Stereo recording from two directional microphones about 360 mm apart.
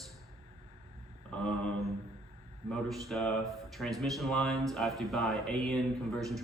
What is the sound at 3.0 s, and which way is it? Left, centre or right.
Speech, centre.